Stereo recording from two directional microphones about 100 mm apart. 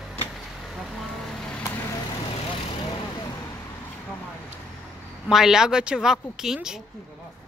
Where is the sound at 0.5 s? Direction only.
Centre (ahead or behind).